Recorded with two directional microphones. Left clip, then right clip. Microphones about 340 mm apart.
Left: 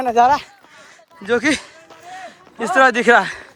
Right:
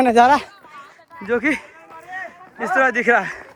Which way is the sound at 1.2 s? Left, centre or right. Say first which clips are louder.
Left 2 dB; centre.